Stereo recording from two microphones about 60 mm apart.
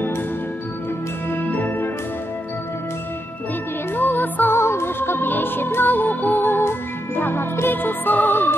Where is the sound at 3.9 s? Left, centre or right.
Left.